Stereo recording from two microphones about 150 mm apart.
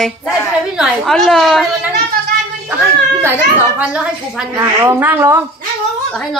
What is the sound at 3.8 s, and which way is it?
Speech, 5° right (ahead or behind).